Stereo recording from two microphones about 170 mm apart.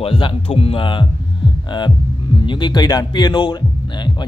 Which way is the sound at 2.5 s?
25° left (ahead or behind).